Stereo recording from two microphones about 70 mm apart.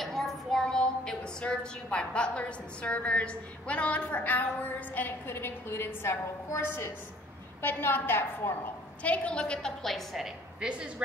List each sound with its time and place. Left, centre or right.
0.0 s a woman's voice: centre; by 8.7 s left
9.0 s a woman's voice: centre